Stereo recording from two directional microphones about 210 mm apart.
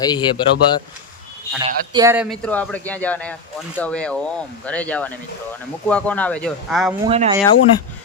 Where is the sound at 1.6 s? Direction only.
20° right (ahead or behind).